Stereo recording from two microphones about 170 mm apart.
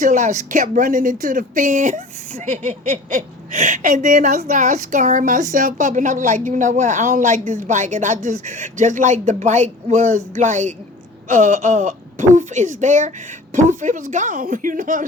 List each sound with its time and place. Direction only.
0.0 s speech: 45° right (ahead or behind)